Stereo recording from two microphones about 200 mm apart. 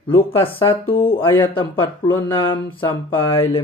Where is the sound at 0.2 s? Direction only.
25° left (ahead or behind).